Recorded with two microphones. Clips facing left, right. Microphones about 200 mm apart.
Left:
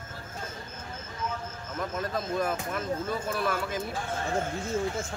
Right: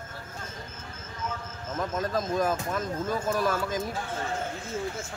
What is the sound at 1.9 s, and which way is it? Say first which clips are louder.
Speech: right 3 dB; 40° right (ahead or behind).